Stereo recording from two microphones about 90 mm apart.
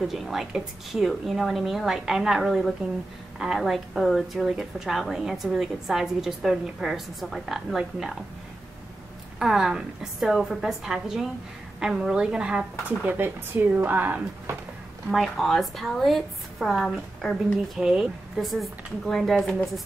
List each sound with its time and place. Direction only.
0.1 s a woman's voice: centre (ahead or behind)
9.4 s a woman's voice: 5° right (ahead or behind)
15.0 s a woman's voice: centre (ahead or behind)